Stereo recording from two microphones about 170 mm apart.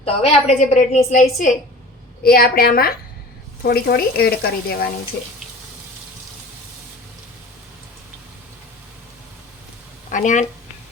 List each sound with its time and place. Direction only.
0.0 s a woman's voice: 35° left (ahead or behind)
2.2 s a woman's voice: 60° left (ahead or behind)
10.1 s speech: 50° left (ahead or behind)